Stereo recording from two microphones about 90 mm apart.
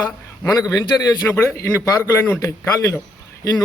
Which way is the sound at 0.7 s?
40° left (ahead or behind).